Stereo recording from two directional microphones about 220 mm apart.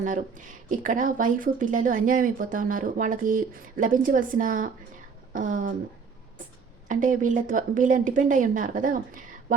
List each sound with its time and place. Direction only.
0.0 s speech: 35° right (ahead or behind)
6.8 s speech: 35° right (ahead or behind)